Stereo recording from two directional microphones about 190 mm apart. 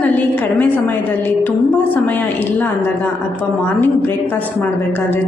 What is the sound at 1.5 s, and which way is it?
A woman's voice, 10° left (ahead or behind).